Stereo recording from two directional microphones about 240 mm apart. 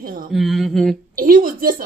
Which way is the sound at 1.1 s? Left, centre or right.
Right.